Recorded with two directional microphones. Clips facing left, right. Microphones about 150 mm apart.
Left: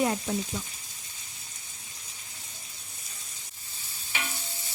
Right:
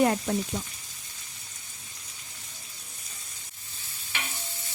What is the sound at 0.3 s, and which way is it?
Sizzle, 55° right (ahead or behind).